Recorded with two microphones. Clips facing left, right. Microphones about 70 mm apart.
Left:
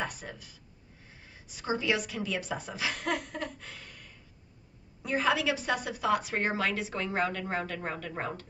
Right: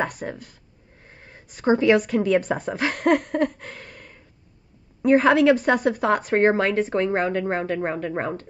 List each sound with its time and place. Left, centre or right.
0.0 s a woman's voice: right